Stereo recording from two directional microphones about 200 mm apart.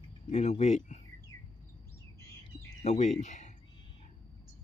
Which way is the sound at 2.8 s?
35° left (ahead or behind).